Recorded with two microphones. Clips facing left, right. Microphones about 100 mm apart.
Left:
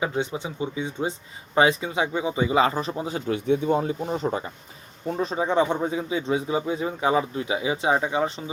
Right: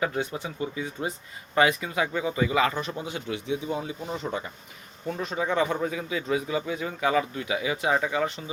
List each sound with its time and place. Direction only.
0.0 s a man's voice: 20° left (ahead or behind)